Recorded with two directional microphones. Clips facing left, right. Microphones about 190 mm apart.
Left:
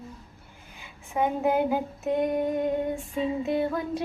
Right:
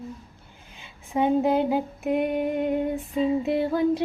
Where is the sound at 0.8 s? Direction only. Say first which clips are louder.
Right 3 dB; 20° right (ahead or behind).